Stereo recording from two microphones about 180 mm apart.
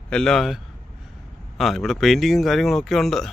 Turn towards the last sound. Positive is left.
turn(degrees=0)  # may be behind; listen again after turning